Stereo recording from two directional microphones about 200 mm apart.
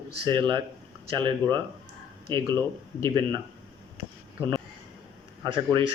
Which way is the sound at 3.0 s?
20° right (ahead or behind).